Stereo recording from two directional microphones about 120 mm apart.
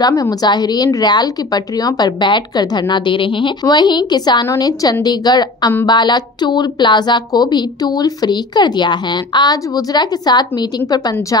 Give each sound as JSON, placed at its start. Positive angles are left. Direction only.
{"t": 0.0, "sound": "a woman's voice", "side_deg": 30}